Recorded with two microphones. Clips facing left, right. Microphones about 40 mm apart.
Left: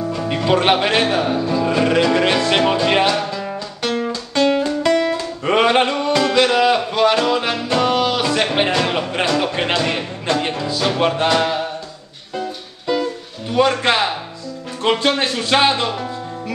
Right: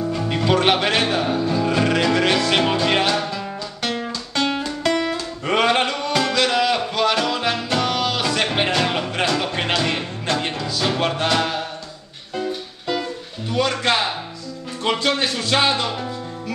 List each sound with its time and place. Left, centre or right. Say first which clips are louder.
0.2 s music: left 2 dB; centre
4.8 s guitar: left 3 dB; centre
5.1 s music: left 4 dB; centre
12.4 s music: right 1 dB; centre
13.6 s a man's voice: left 4 dB; left